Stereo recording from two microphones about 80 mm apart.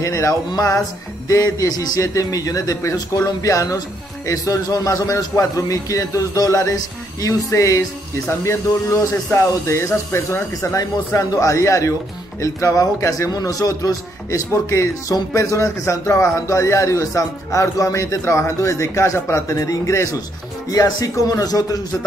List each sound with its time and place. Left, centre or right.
0.0 s a man's voice: left
9.3 s a man's voice: left